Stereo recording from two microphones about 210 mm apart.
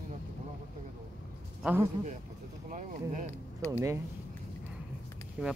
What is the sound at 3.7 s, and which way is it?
Speech, 15° right (ahead or behind).